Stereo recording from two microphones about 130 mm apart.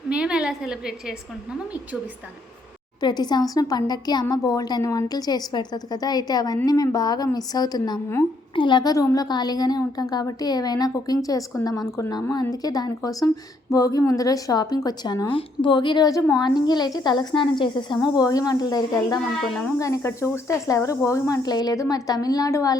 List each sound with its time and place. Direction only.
0.1 s a woman's voice: 5° right (ahead or behind)
3.0 s a woman's voice: 35° left (ahead or behind)
19.4 s speech: 5° left (ahead or behind)
19.8 s a woman's voice: 20° left (ahead or behind)